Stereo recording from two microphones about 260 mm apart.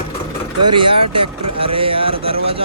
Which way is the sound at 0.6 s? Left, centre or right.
Centre.